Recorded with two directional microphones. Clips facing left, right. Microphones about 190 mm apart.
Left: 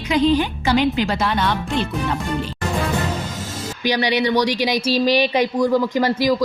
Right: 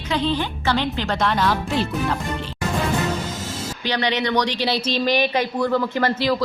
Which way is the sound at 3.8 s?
10° left (ahead or behind).